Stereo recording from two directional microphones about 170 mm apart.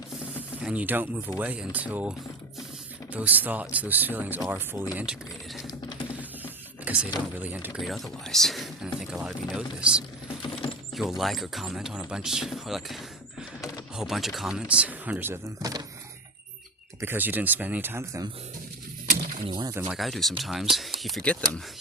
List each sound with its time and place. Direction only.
0.6 s speech: 10° right (ahead or behind)
5.6 s typing: 25° left (ahead or behind)
6.1 s a sound: 10° right (ahead or behind)
7.4 s speech: 10° right (ahead or behind)
10.4 s a sound: 30° left (ahead or behind)
10.9 s speech: centre (ahead or behind); by 15.9 s 20° right (ahead or behind)
17.0 s speech: 10° right (ahead or behind)
19.5 s speech: 25° right (ahead or behind)
19.9 s speech: centre (ahead or behind)